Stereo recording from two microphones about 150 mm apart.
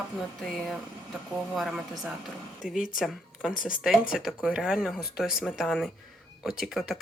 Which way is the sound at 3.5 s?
65° left (ahead or behind).